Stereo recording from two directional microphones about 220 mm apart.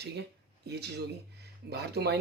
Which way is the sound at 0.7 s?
50° right (ahead or behind).